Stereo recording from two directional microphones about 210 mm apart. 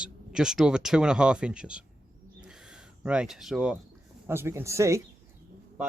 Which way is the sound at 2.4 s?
5° right (ahead or behind).